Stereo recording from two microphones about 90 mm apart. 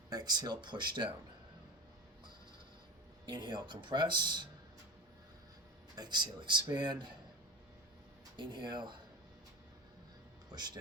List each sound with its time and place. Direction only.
0.1 s speech: 50° right (ahead or behind)
3.2 s speech: 55° right (ahead or behind)
6.0 s speech: 55° right (ahead or behind)
8.4 s speech: 55° right (ahead or behind)